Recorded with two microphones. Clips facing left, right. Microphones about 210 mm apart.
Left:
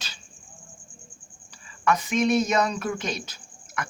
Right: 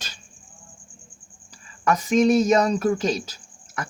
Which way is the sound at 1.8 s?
40° right (ahead or behind).